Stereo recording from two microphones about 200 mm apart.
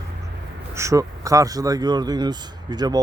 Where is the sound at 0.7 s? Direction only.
15° right (ahead or behind).